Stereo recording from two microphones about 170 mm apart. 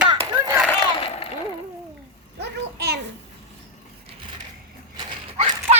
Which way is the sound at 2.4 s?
75° right (ahead or behind).